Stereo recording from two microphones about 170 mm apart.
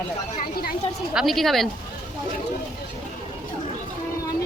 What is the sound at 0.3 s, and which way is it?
Speech, 60° left (ahead or behind).